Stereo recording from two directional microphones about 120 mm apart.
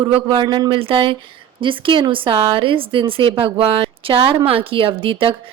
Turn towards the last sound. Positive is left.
turn(degrees=-45)  # may be behind; listen again after turning